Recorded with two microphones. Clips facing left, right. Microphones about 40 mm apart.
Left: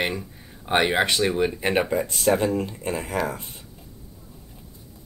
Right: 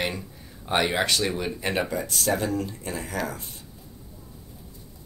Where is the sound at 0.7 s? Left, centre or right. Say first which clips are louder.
Left 3 dB; left.